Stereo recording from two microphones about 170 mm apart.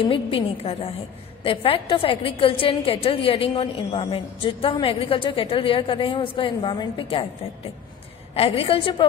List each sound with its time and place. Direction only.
0.0 s a woman's voice: 30° left (ahead or behind)
8.4 s a woman's voice: 35° left (ahead or behind)